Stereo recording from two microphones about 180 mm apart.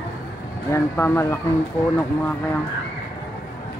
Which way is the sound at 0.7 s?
15° left (ahead or behind).